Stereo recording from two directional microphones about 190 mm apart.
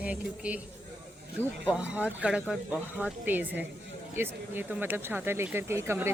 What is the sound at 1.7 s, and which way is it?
A woman's voice, 5° right (ahead or behind).